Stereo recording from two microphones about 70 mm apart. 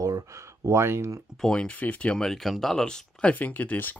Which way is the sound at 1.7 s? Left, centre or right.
Left.